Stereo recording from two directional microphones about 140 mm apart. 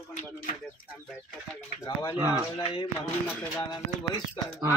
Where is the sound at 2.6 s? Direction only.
40° left (ahead or behind).